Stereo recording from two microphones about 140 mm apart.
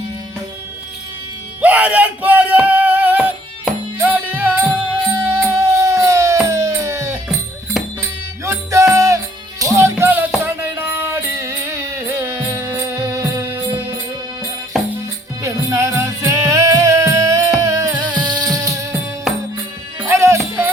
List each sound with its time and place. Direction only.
1.6 s music: 10° right (ahead or behind)
7.8 s music: 5° right (ahead or behind)
8.4 s music: 20° right (ahead or behind)
15.4 s music: 20° right (ahead or behind)
20.1 s music: 20° right (ahead or behind)